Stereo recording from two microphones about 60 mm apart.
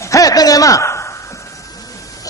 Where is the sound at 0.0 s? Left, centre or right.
Left.